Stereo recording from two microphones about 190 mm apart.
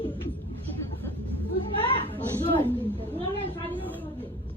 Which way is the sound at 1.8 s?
30° left (ahead or behind).